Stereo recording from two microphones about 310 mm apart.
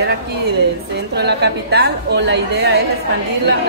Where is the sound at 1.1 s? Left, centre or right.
Right.